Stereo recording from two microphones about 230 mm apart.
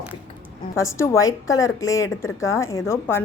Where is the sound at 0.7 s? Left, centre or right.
Centre.